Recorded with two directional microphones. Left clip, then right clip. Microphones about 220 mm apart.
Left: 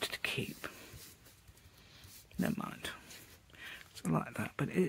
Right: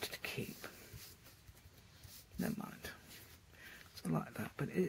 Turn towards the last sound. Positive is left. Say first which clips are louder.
# left 4 dB
turn(degrees=25)  # may be behind; listen again after turning